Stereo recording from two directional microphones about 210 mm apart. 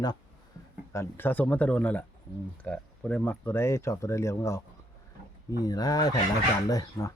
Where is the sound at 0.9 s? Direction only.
10° left (ahead or behind).